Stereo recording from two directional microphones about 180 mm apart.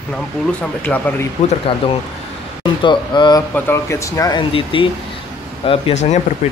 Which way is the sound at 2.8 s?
25° left (ahead or behind).